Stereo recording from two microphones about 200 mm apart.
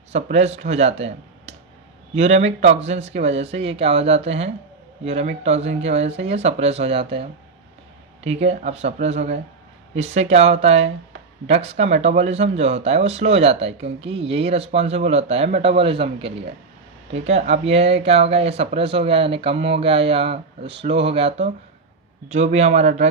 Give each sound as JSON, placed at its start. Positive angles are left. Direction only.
{"t": 0.1, "sound": "speech", "side_deg": -35}